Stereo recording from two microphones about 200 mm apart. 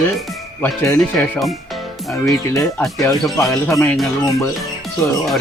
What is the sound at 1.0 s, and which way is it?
Speech, centre (ahead or behind).